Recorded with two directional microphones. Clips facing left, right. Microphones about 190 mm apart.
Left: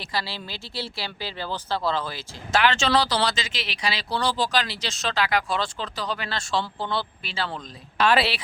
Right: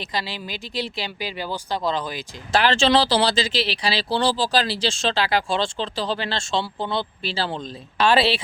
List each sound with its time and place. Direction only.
0.0 s speech: 20° right (ahead or behind)
2.5 s speech: 35° right (ahead or behind)
7.2 s speech: 30° right (ahead or behind)